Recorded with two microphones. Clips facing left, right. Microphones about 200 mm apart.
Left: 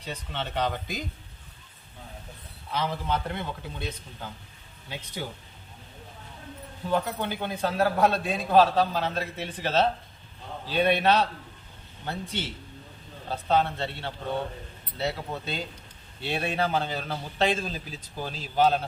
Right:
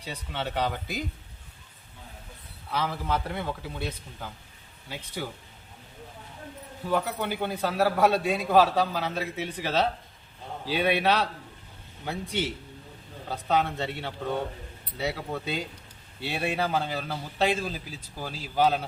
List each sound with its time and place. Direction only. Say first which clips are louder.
0.0 s a man's voice: right 1 dB; 10° right (ahead or behind)
2.7 s a man's voice: even; 5° right (ahead or behind)
6.9 s a man's voice: even; 10° right (ahead or behind)
13.5 s a man's voice: left 1 dB; 10° right (ahead or behind)